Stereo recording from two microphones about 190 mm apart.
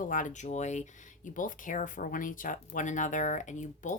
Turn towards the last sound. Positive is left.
turn(degrees=40)  # may be behind; listen again after turning